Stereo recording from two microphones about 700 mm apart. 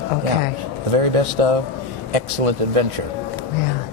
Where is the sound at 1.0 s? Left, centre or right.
Right.